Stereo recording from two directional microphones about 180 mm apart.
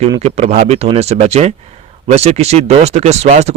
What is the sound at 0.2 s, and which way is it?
Speech, 35° right (ahead or behind).